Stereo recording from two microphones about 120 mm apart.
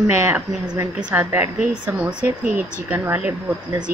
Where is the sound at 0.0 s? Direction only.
20° right (ahead or behind).